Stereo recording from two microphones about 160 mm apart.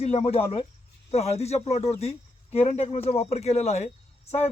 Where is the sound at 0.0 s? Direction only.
40° left (ahead or behind).